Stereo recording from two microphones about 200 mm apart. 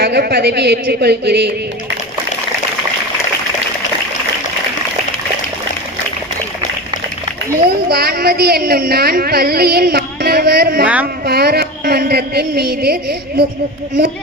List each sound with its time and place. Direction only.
0.0 s a woman's voice: 50° right (ahead or behind)
7.9 s a woman's voice: 50° right (ahead or behind)